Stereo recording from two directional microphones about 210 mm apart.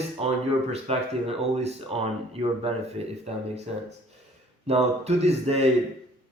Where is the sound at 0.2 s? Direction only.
30° right (ahead or behind).